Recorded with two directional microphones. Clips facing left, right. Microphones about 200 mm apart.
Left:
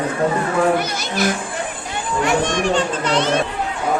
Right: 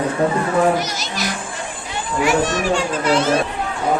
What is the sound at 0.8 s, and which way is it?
Speech, 55° left (ahead or behind).